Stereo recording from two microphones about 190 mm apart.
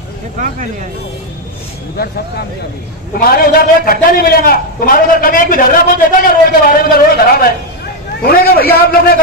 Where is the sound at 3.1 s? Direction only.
55° left (ahead or behind).